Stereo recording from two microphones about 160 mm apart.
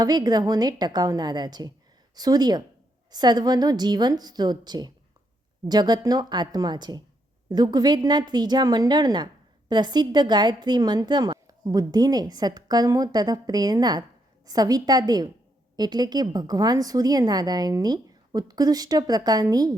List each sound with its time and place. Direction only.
0.0 s a woman's voice: 25° right (ahead or behind)